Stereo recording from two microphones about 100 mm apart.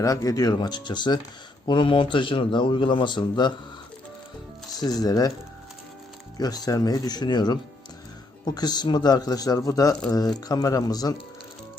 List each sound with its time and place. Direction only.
0.0 s a man's voice: 35° left (ahead or behind)
4.7 s speech: 40° left (ahead or behind)
6.3 s speech: 40° left (ahead or behind)